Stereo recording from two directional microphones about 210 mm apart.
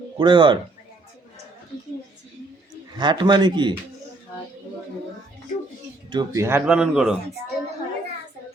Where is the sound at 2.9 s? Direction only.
20° right (ahead or behind).